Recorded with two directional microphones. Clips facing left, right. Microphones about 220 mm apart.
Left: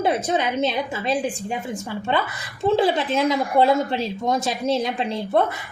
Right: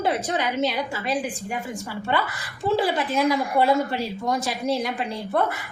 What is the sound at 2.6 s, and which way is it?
A woman's voice, 25° left (ahead or behind).